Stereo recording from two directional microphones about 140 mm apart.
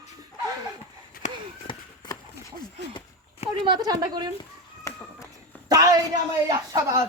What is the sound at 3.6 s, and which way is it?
Speech, 30° right (ahead or behind).